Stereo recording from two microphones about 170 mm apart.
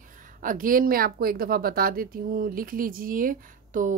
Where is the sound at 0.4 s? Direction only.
55° right (ahead or behind).